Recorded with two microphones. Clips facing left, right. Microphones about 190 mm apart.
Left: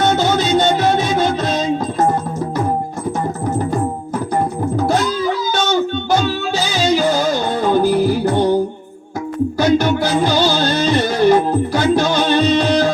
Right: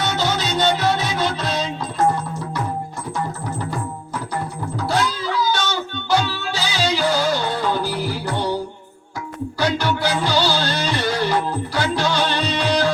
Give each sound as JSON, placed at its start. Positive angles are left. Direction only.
{"t": 0.0, "sound": "music", "side_deg": 50}
{"t": 4.4, "sound": "music", "side_deg": 50}